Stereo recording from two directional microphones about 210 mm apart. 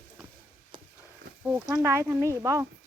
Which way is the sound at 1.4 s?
10° right (ahead or behind).